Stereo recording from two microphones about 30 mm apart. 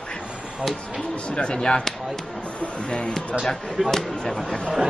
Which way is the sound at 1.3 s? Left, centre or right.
Left.